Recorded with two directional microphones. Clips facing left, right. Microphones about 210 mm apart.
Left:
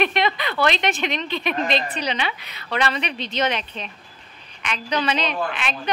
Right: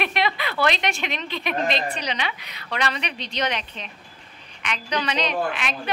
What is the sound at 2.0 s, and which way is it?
A woman's voice, 30° left (ahead or behind).